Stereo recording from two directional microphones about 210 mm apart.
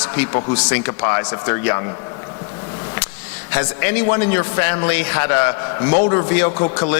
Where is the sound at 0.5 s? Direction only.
15° left (ahead or behind).